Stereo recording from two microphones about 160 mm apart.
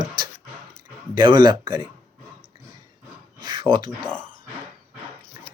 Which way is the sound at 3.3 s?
30° right (ahead or behind).